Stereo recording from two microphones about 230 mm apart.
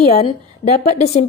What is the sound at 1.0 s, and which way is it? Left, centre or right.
Speech, left.